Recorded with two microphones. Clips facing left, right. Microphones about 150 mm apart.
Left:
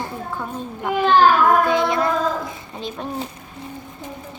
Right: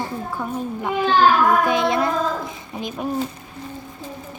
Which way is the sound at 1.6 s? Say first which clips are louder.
Even; 20° right (ahead or behind).